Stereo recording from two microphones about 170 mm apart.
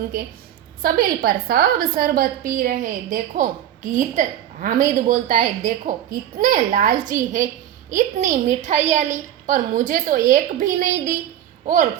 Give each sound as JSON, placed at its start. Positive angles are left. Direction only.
{"t": 0.8, "sound": "a woman's voice", "side_deg": -60}